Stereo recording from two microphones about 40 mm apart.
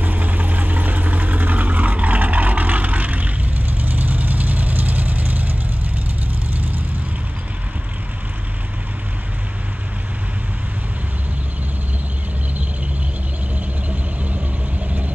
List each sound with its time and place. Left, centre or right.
0.0 s vehicle: right
13.8 s vehicle: right